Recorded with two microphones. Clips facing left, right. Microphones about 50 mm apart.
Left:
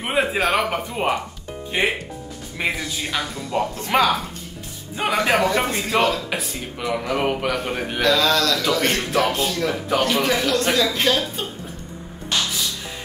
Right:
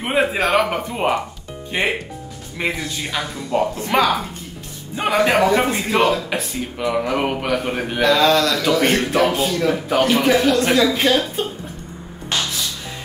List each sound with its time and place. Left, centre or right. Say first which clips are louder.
0.0 s a man's voice: right 2 dB; centre
8.5 s a man's voice: right 4 dB; centre